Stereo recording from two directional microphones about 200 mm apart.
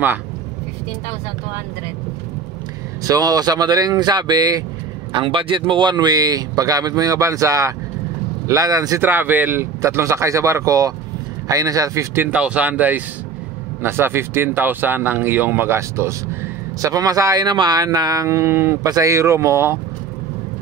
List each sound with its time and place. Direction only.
3.0 s speech: 20° right (ahead or behind)